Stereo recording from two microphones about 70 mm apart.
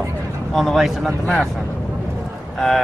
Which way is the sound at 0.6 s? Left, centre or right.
Centre.